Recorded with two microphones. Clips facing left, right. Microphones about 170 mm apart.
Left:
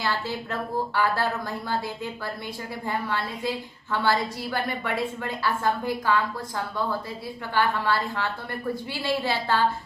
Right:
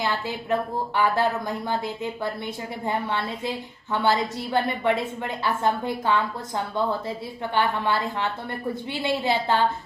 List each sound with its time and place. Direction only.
0.9 s a woman's voice: 20° right (ahead or behind)
2.8 s a woman's voice: 20° right (ahead or behind)
7.5 s a woman's voice: 20° right (ahead or behind)